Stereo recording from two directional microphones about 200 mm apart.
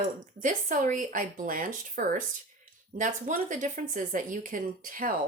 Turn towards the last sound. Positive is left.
turn(degrees=-45)  # may be behind; listen again after turning